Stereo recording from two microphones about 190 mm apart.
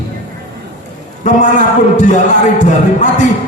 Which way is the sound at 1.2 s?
40° left (ahead or behind).